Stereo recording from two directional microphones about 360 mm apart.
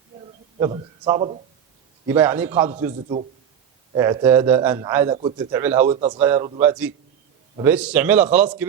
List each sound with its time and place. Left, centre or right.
0.6 s a man's voice: centre
2.5 s a man's voice: centre